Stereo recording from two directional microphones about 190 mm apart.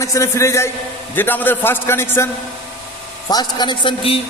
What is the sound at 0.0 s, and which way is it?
A man's voice, 15° left (ahead or behind).